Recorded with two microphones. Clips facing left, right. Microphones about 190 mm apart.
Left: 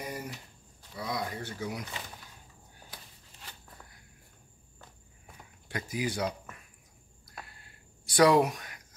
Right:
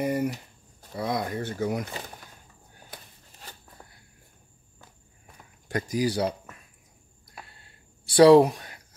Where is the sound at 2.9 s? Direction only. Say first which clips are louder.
Right 6 dB; 40° right (ahead or behind).